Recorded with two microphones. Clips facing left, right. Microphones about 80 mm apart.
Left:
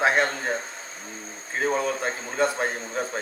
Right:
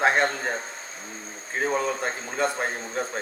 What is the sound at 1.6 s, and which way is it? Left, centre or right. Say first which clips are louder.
Speech: left 1 dB; centre.